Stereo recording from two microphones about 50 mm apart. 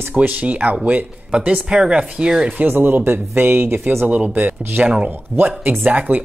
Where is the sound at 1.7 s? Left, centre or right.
Centre.